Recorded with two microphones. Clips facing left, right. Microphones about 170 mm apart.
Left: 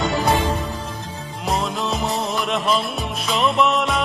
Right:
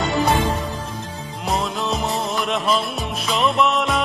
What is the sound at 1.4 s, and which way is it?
Music, centre (ahead or behind).